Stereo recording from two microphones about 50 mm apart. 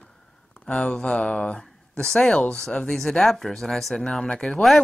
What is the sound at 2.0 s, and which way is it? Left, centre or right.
Speech, centre.